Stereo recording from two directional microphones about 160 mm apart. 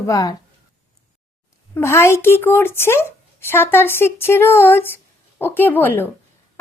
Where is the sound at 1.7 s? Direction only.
15° left (ahead or behind).